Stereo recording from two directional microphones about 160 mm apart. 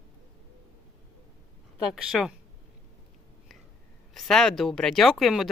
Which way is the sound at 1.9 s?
Centre (ahead or behind).